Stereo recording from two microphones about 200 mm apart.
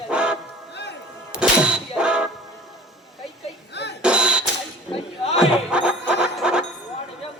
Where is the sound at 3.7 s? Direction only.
60° left (ahead or behind).